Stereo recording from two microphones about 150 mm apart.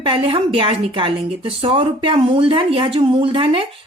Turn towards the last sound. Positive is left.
turn(degrees=-35)  # may be behind; listen again after turning